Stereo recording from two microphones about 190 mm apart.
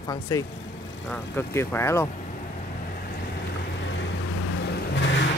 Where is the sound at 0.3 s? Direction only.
15° left (ahead or behind).